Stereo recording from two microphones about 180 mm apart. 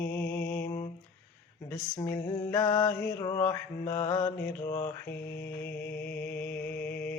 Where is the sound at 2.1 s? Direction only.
15° left (ahead or behind).